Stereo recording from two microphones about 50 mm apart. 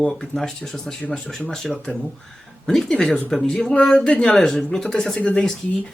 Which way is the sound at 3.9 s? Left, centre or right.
Left.